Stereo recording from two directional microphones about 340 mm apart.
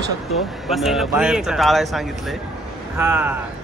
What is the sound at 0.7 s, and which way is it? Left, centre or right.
Speech, centre.